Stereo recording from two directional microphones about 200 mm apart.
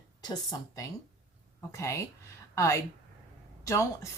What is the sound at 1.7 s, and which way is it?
Speech, 15° left (ahead or behind).